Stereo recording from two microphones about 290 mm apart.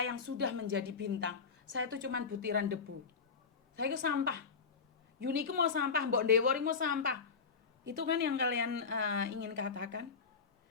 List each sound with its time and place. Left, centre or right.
0.0 s a woman's voice: right
3.8 s a woman's voice: right
5.5 s a woman's voice: right